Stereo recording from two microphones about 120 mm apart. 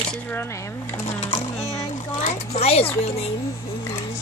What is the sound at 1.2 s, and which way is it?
Music, 65° left (ahead or behind).